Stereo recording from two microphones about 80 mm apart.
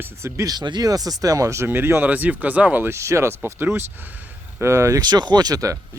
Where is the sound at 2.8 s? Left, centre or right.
Right.